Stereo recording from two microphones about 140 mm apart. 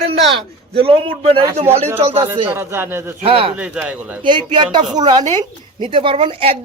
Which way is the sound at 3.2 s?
40° right (ahead or behind).